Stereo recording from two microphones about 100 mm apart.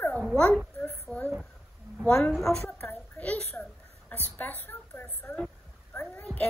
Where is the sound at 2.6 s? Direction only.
20° left (ahead or behind).